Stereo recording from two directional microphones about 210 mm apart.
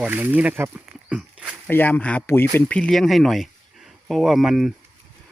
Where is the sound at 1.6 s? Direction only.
10° left (ahead or behind).